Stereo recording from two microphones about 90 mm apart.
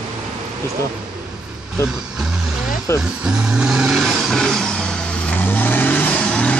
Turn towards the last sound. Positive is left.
turn(degrees=10)  # may be behind; listen again after turning